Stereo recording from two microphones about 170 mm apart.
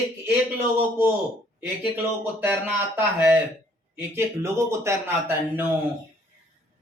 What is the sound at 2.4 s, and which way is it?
Speech, 10° right (ahead or behind).